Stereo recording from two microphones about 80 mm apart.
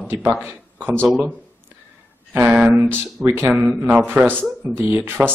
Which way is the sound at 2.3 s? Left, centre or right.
Right.